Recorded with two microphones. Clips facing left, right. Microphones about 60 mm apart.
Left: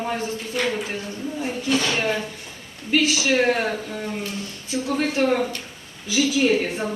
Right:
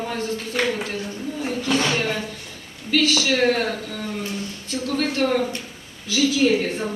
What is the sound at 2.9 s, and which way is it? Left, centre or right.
A woman's voice, centre.